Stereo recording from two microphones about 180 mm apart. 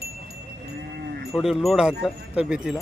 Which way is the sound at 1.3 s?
Centre (ahead or behind).